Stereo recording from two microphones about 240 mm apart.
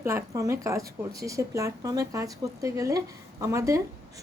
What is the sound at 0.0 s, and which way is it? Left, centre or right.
A woman's voice, centre.